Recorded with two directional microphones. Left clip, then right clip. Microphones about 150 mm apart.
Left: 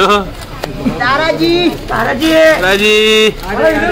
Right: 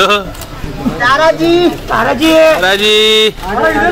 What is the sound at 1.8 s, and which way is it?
Speech, 85° right.